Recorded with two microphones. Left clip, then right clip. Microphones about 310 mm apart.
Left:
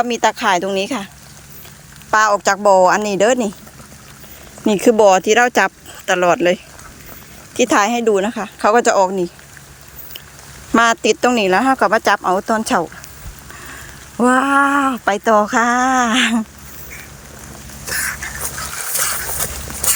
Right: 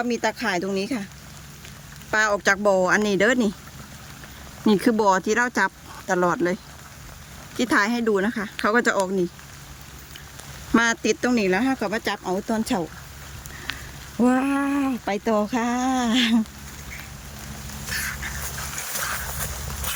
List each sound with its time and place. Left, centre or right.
0.1 s speech: centre
2.0 s speech: centre
4.8 s speech: centre
7.7 s speech: centre
10.8 s speech: centre
14.2 s speech: centre
18.9 s a sound: left